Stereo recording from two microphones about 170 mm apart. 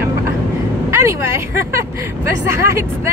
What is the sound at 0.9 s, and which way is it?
Speech, 15° right (ahead or behind).